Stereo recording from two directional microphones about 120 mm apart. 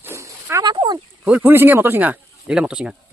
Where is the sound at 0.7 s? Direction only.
35° right (ahead or behind).